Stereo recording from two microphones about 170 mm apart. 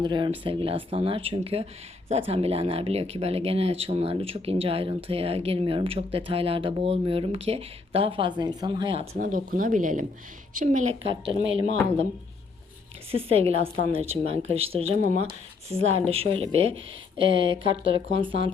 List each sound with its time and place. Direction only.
0.0 s speech: 25° right (ahead or behind)
9.1 s speech: 55° right (ahead or behind)
11.0 s speech: 30° right (ahead or behind)
13.1 s speech: 35° right (ahead or behind)